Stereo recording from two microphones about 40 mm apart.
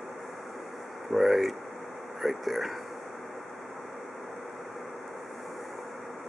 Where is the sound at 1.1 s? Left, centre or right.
Centre.